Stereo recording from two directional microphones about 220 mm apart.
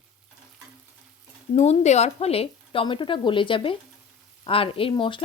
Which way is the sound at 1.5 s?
30° left (ahead or behind).